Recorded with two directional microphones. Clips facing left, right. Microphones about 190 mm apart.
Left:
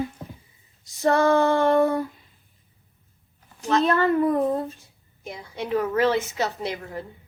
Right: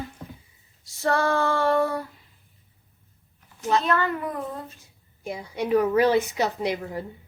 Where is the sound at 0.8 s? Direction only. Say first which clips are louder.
Left 4 dB; 20° left (ahead or behind).